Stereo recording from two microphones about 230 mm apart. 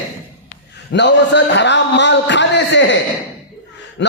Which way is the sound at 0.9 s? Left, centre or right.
Left.